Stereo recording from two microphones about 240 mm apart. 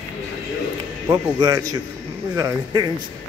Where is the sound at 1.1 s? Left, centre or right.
Centre.